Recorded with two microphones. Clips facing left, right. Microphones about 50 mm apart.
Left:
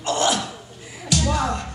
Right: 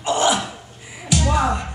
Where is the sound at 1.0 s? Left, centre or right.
Right.